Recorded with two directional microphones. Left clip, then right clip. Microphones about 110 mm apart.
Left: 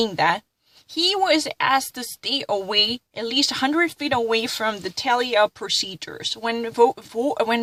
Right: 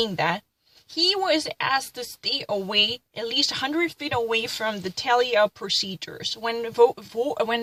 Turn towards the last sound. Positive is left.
turn(degrees=60)  # may be behind; listen again after turning